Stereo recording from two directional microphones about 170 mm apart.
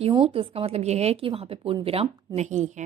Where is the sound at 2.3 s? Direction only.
45° right (ahead or behind).